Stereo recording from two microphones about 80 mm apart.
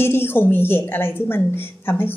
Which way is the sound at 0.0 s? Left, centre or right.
Left.